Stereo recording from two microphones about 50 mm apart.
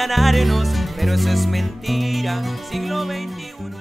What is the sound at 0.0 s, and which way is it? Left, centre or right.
Music, centre.